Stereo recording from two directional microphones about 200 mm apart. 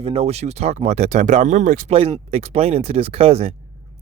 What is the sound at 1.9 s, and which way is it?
Speech, 30° right (ahead or behind).